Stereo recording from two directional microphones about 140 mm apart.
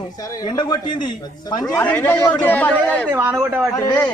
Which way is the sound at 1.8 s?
10° left (ahead or behind).